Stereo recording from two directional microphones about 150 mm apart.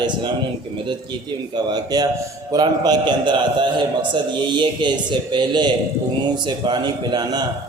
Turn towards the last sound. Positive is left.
turn(degrees=-30)  # may be behind; listen again after turning